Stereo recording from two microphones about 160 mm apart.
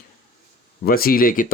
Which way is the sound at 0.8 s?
65° left (ahead or behind).